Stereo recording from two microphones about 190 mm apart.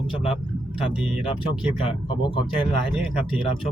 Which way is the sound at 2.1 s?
25° left (ahead or behind).